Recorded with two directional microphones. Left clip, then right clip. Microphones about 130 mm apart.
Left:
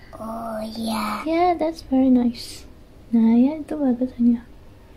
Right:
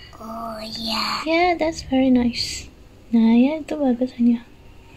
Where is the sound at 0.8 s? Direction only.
90° left.